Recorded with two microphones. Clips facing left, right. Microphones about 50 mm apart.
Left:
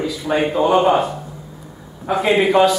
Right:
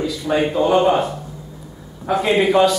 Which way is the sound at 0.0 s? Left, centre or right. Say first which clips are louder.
Even; centre.